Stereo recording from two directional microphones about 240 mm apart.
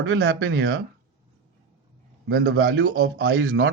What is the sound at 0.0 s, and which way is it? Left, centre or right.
Speech, right.